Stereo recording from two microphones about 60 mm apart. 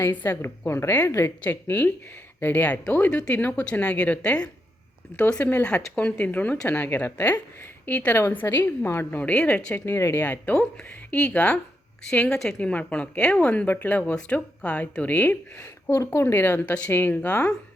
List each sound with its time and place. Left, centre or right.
0.1 s a woman's voice: left
1.5 s a woman's voice: left
5.4 s a woman's voice: left
5.6 s a woman's voice: left
9.1 s speech: left
9.8 s a woman's voice: left
12.3 s a woman's voice: centre
12.5 s speech: left
15.5 s a woman's voice: left
16.2 s a woman's voice: left